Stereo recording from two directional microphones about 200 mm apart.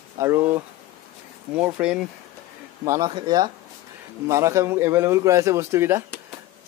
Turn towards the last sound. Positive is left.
turn(degrees=-15)  # may be behind; listen again after turning